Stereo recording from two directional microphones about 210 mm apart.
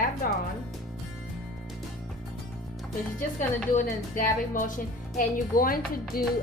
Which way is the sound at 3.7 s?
40° left (ahead or behind).